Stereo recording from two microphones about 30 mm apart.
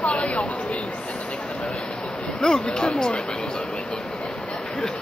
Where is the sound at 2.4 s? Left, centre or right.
Left.